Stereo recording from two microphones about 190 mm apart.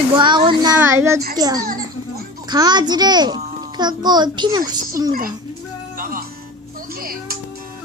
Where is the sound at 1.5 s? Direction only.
50° right (ahead or behind).